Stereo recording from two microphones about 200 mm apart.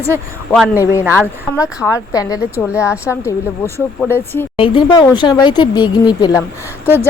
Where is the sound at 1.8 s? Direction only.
20° left (ahead or behind).